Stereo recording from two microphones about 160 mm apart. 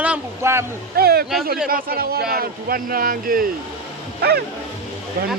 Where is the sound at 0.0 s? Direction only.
10° right (ahead or behind).